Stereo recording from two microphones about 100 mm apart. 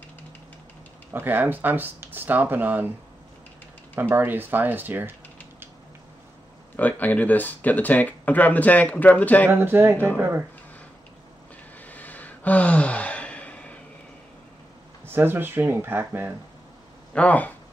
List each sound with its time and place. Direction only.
1.1 s speech: 20° right (ahead or behind)
4.1 s speech: 20° right (ahead or behind)
6.8 s speech: 15° left (ahead or behind)
9.5 s speech: 25° right (ahead or behind)
11.8 s gasp: 15° left (ahead or behind)
15.0 s speech: 20° right (ahead or behind)
17.1 s speech: 15° left (ahead or behind)